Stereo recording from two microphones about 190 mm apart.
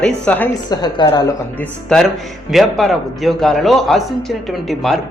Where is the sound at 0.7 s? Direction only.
20° left (ahead or behind).